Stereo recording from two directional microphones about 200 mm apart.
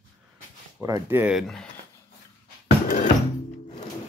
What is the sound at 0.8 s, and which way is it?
Speech, 15° right (ahead or behind).